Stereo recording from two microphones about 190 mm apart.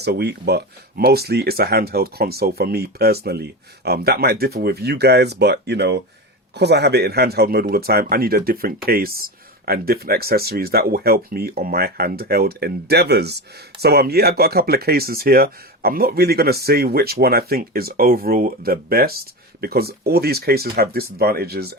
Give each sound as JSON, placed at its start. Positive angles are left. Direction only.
{"t": 0.0, "sound": "speech", "side_deg": -60}